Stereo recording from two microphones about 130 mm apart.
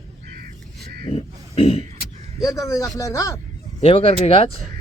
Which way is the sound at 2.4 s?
25° left (ahead or behind).